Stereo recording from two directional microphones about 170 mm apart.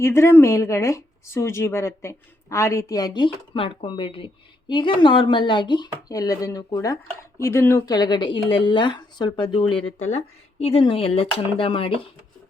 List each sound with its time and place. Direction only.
0.0 s speech: 15° left (ahead or behind); by 12.0 s 30° left (ahead or behind)